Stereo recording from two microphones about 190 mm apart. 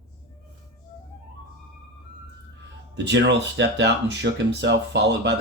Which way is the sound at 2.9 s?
70° right (ahead or behind).